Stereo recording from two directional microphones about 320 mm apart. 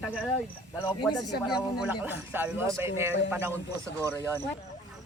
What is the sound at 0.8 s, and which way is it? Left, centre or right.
Speech, centre.